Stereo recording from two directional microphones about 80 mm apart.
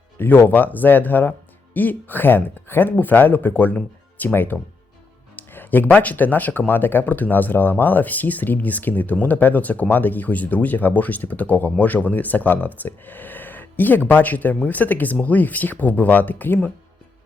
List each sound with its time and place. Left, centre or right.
0.2 s speech: left